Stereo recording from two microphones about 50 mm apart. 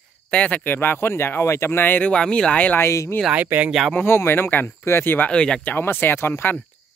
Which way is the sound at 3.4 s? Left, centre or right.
Right.